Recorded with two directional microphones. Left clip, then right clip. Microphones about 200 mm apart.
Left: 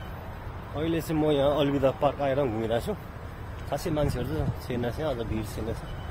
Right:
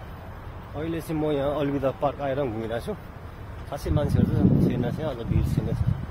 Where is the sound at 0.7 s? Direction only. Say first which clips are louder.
Left 1 dB; 15° left (ahead or behind).